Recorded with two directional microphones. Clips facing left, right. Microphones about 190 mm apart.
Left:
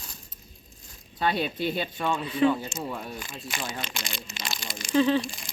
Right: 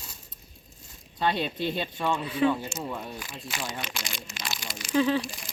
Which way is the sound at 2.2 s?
10° right (ahead or behind).